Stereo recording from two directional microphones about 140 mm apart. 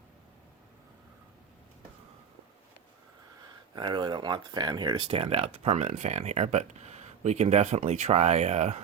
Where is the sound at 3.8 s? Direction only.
35° right (ahead or behind).